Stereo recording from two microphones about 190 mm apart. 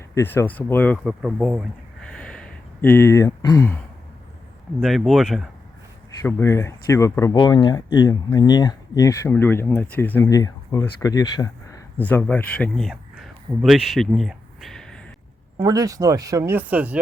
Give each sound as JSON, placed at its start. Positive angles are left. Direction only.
{"t": 0.1, "sound": "speech", "side_deg": 15}
{"t": 4.8, "sound": "speech", "side_deg": 0}
{"t": 6.2, "sound": "speech", "side_deg": 15}
{"t": 15.5, "sound": "speech", "side_deg": -20}